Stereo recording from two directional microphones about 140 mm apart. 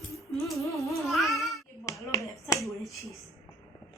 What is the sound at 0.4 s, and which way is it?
Music, centre (ahead or behind).